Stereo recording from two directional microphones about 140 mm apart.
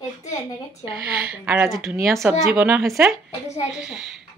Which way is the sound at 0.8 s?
10° right (ahead or behind).